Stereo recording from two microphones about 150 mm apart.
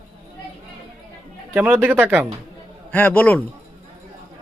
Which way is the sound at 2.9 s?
10° left (ahead or behind).